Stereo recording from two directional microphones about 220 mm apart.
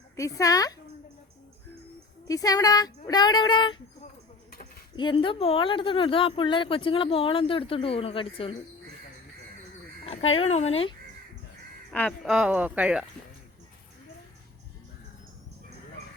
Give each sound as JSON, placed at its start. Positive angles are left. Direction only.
{"t": 0.2, "sound": "speech", "side_deg": 15}
{"t": 2.2, "sound": "speech", "side_deg": 15}
{"t": 4.9, "sound": "speech", "side_deg": 20}
{"t": 10.3, "sound": "speech", "side_deg": 30}
{"t": 11.9, "sound": "speech", "side_deg": 5}